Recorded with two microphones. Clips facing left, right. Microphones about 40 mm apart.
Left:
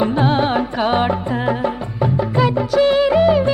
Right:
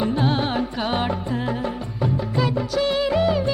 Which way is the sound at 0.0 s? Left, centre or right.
Left.